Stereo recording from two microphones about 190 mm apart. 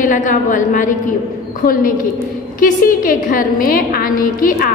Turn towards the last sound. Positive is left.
turn(degrees=50)  # may be behind; listen again after turning